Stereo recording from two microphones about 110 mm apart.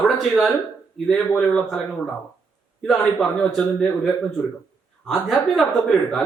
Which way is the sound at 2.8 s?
5° left (ahead or behind).